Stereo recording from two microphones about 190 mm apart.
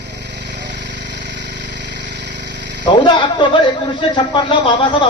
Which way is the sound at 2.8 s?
25° left (ahead or behind).